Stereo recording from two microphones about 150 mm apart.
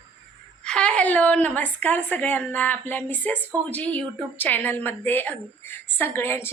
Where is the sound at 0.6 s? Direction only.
5° left (ahead or behind).